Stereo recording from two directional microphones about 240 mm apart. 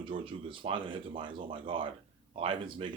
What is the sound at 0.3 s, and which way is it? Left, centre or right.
Speech, right.